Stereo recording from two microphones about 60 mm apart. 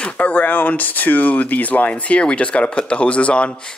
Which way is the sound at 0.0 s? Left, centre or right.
Left.